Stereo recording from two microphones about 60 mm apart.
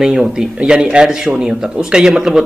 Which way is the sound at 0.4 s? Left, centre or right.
Centre.